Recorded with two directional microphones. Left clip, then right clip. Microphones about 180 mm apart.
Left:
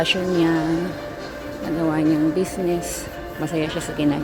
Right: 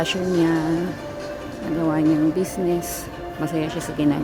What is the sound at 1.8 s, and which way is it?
Speech, 5° right (ahead or behind).